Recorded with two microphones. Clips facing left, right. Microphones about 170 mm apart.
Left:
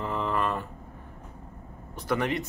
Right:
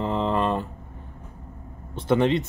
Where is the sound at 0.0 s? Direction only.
20° right (ahead or behind).